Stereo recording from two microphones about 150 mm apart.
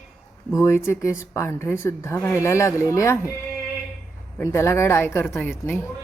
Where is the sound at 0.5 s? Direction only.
20° left (ahead or behind).